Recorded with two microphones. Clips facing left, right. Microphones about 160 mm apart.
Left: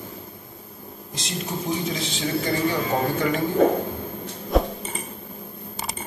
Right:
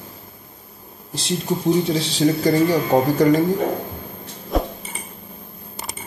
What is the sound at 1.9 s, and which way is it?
Speech, 35° right (ahead or behind).